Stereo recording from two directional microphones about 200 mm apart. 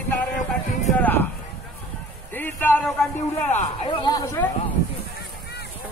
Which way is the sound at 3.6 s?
30° left (ahead or behind).